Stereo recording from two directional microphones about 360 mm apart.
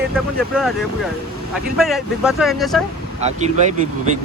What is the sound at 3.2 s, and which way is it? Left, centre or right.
Speech, centre.